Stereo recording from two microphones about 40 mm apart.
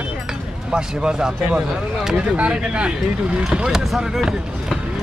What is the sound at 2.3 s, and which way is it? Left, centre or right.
Speech, right.